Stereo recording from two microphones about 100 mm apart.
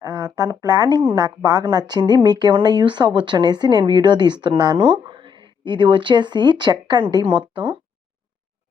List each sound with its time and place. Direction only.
0.0 s a woman's voice: 40° right (ahead or behind)